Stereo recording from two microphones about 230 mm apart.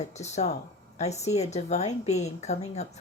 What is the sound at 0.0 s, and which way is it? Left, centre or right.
A woman's voice, left.